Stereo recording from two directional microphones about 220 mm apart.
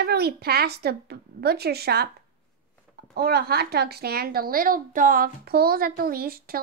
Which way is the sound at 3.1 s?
45° right (ahead or behind).